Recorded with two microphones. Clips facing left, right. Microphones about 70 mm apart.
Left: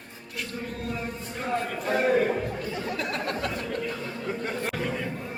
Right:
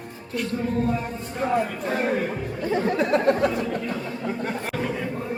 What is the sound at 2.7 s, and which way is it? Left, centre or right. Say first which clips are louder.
Speech: right 9 dB; right.